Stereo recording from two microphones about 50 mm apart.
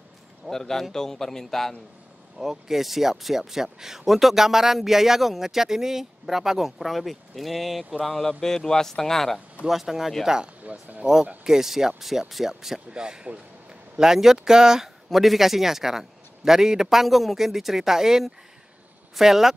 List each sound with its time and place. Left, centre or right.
0.5 s speech: centre
2.3 s speech: centre
9.7 s speech: centre
10.6 s speech: right
11.4 s speech: centre